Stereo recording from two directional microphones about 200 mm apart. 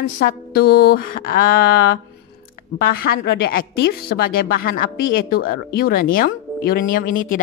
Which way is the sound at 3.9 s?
45° left (ahead or behind).